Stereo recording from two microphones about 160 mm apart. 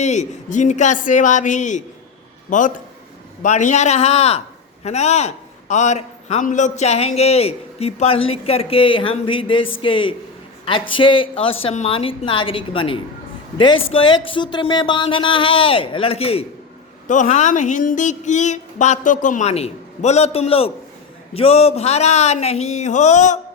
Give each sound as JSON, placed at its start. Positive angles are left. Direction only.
{"t": 0.0, "sound": "a man's voice", "side_deg": 45}
{"t": 17.1, "sound": "speech", "side_deg": 50}